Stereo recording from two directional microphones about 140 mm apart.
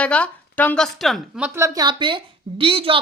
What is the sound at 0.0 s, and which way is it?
Speech, 10° left (ahead or behind).